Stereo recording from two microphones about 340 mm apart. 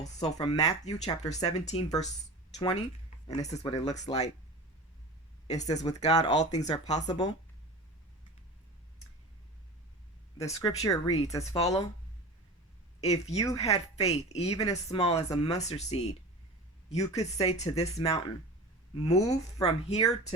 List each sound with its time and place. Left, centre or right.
0.0 s a woman's voice: centre
5.5 s speech: centre
10.3 s a woman's voice: centre
13.0 s a woman's voice: centre